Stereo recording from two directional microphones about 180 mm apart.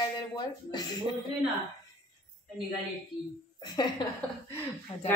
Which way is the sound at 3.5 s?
25° left (ahead or behind).